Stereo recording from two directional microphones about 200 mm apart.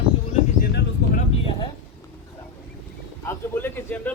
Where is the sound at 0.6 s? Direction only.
50° left (ahead or behind).